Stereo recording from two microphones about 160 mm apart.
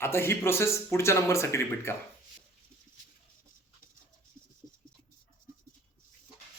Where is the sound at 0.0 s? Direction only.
15° left (ahead or behind).